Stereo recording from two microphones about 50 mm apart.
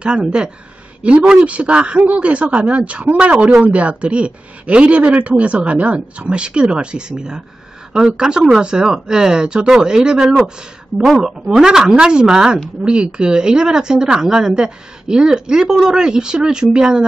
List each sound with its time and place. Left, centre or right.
0.0 s speech: centre